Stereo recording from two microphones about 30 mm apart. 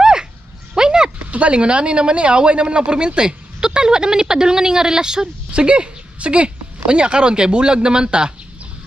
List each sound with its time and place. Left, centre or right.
0.0 s a sound: right
1.3 s a woman's voice: right
5.5 s speech: right